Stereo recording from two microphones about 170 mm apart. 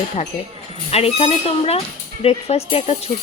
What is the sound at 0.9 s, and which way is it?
Speech, 35° left (ahead or behind).